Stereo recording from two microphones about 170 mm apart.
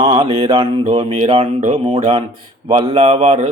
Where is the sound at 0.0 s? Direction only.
30° right (ahead or behind).